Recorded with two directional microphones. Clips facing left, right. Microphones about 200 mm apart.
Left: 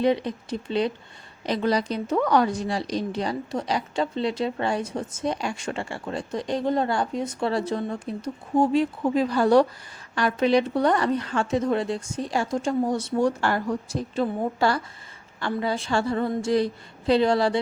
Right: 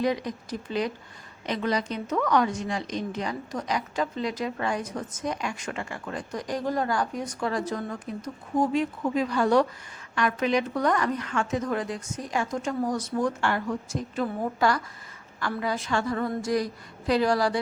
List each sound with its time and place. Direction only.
0.0 s a woman's voice: 30° left (ahead or behind)